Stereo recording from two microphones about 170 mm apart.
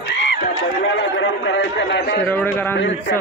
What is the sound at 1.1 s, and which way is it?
Chatter, 90° left.